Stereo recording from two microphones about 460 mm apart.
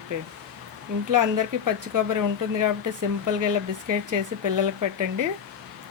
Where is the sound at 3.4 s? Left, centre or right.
Right.